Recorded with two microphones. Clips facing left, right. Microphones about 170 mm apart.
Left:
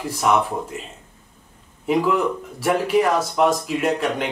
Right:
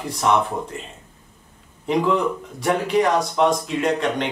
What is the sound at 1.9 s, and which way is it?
Speech, 5° left (ahead or behind).